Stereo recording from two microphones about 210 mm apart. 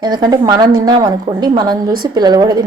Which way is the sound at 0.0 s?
20° right (ahead or behind).